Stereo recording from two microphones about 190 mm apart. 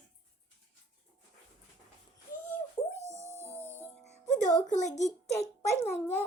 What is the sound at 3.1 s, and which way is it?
Music, 35° left (ahead or behind).